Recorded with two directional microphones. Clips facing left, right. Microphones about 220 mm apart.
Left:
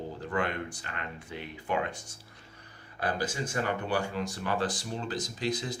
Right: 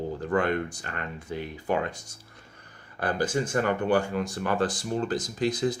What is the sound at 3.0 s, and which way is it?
Speech, 50° right (ahead or behind).